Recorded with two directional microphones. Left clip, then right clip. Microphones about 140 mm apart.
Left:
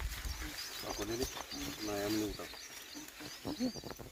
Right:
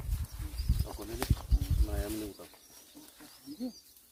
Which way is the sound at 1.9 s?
10° right (ahead or behind).